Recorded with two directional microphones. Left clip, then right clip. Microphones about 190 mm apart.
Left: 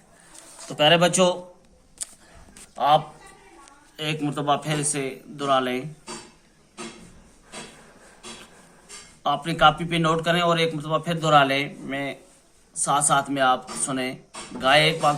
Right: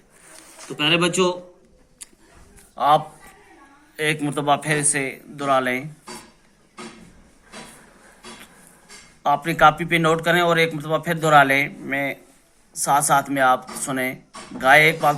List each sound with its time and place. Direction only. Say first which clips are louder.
2.7 s speech: right 2 dB; 10° right (ahead or behind); by 5.8 s 25° right (ahead or behind)
9.2 s speech: right 3 dB; 20° right (ahead or behind)